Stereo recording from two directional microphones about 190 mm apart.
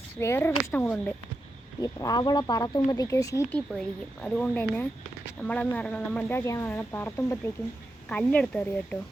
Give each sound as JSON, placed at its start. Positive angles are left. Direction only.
{"t": 0.2, "sound": "speech", "side_deg": 10}
{"t": 3.8, "sound": "speech", "side_deg": 5}